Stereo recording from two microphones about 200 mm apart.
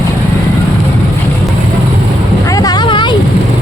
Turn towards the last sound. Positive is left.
turn(degrees=20)  # may be behind; listen again after turning